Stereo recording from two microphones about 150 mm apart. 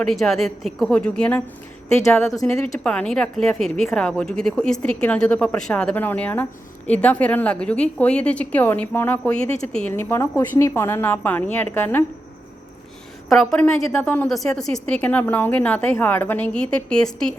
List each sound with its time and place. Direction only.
0.0 s a woman's voice: centre (ahead or behind)
2.0 s speech: 20° left (ahead or behind)
2.7 s a woman's voice: 5° left (ahead or behind)
13.2 s a woman's voice: centre (ahead or behind)